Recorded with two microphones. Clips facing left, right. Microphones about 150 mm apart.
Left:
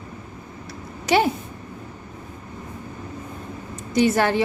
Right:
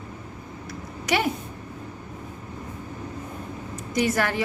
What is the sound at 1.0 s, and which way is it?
Speech, 30° left (ahead or behind).